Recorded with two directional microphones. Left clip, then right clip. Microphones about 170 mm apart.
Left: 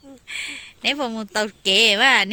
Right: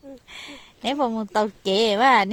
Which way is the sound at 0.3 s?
25° right (ahead or behind).